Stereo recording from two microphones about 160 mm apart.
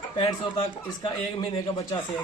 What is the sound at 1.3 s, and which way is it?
Speech, 25° left (ahead or behind).